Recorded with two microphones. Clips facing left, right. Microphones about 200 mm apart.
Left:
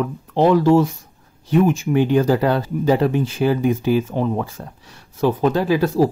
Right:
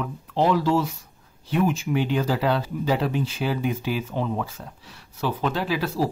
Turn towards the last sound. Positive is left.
turn(degrees=50)  # may be behind; listen again after turning